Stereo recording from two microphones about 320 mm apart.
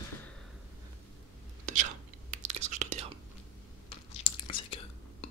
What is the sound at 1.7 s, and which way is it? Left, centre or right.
Whispering, right.